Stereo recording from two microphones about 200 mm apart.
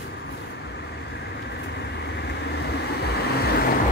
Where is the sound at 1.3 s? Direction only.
55° left (ahead or behind).